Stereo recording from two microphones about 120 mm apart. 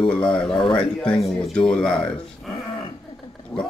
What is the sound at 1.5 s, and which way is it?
Speech, 5° left (ahead or behind).